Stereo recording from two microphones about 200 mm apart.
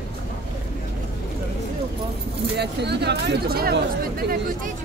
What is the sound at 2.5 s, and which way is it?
Speech, 55° right (ahead or behind).